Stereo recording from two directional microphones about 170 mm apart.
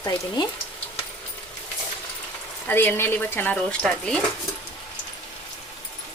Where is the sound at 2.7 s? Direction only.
10° left (ahead or behind).